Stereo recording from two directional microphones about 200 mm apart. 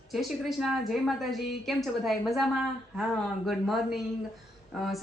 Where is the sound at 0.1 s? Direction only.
Centre (ahead or behind).